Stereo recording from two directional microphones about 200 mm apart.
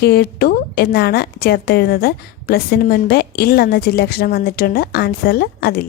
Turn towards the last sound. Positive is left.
turn(degrees=50)  # may be behind; listen again after turning